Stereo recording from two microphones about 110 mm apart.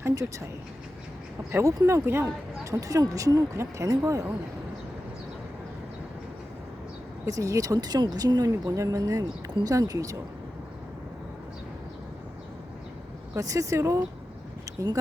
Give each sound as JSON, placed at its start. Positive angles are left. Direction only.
{"t": 0.0, "sound": "speech", "side_deg": -25}
{"t": 1.5, "sound": "speech", "side_deg": -25}
{"t": 7.3, "sound": "speech", "side_deg": -30}
{"t": 13.3, "sound": "speech", "side_deg": -30}